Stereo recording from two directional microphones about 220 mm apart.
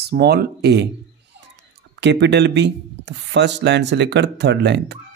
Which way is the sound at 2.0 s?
55° right (ahead or behind).